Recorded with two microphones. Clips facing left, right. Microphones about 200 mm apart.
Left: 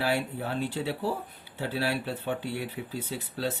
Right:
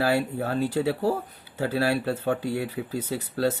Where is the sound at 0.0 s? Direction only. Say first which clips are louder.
Right 5 dB; 40° right (ahead or behind).